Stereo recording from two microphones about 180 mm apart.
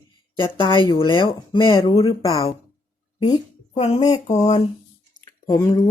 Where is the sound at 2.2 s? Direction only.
20° left (ahead or behind).